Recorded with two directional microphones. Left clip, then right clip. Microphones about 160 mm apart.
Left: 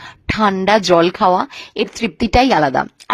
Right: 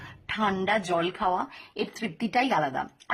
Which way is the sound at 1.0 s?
45° left (ahead or behind).